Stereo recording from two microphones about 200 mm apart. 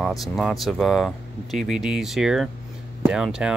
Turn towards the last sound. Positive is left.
turn(degrees=-5)  # may be behind; listen again after turning